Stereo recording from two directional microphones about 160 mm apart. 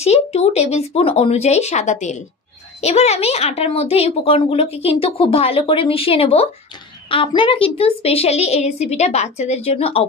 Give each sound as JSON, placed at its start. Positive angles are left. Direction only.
{"t": 0.0, "sound": "speech", "side_deg": 40}